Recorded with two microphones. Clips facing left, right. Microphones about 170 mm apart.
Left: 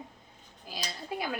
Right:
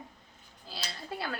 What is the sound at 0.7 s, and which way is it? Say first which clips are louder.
Speech: left 3 dB; 15° left (ahead or behind).